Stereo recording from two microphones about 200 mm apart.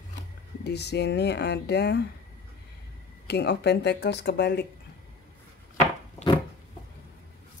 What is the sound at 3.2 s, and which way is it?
Speech, 55° left (ahead or behind).